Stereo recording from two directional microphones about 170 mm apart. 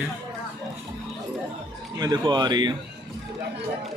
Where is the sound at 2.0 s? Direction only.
25° right (ahead or behind).